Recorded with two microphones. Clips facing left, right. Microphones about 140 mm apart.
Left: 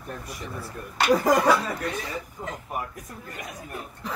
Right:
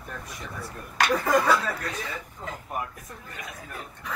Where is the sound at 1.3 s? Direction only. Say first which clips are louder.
Left 2 dB; 15° left (ahead or behind).